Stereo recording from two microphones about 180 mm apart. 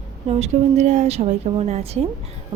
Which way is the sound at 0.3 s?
35° right (ahead or behind).